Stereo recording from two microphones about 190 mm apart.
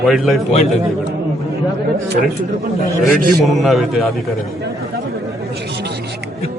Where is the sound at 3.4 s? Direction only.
Centre (ahead or behind).